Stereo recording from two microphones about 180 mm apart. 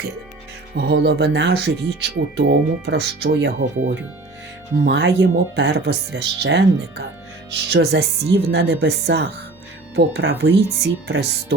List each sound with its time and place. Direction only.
0.8 s speech: 65° right (ahead or behind)